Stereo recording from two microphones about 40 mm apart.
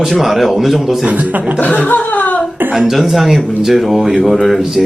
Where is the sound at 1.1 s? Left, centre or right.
Right.